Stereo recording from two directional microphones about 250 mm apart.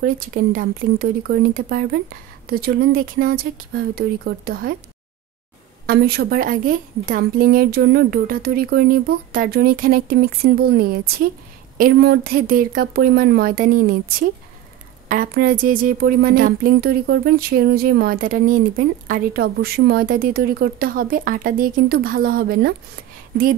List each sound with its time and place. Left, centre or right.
0.0 s speech: right
5.9 s speech: right